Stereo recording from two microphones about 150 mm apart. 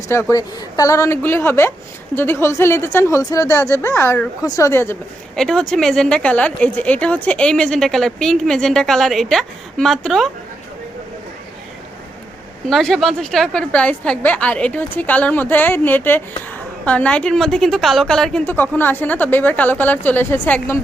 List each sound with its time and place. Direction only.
0.1 s a woman's voice: 20° left (ahead or behind)
5.4 s a woman's voice: 5° left (ahead or behind)
12.6 s a woman's voice: centre (ahead or behind)